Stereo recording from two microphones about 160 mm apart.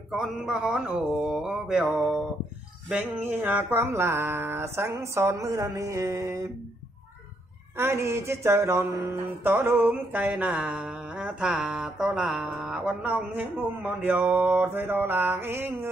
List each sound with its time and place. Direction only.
0.1 s mantra: centre (ahead or behind)
3.3 s music: 15° right (ahead or behind)
7.7 s music: 15° right (ahead or behind)